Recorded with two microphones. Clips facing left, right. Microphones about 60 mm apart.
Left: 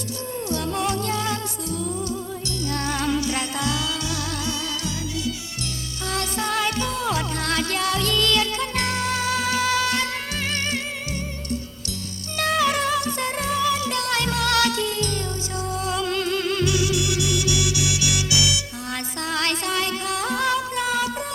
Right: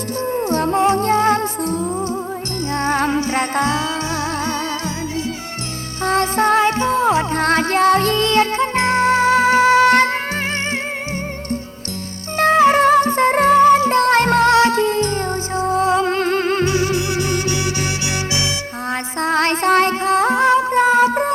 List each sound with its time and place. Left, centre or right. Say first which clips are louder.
0.3 s music: right 9 dB; right
6.1 s music: right 11 dB; right
12.4 s music: right 9 dB; right